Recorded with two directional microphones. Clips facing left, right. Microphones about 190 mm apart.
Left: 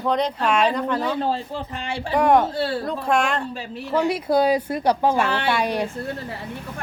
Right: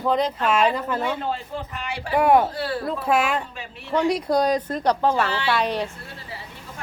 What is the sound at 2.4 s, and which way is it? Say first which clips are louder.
Speech: left 3 dB; 25° left (ahead or behind).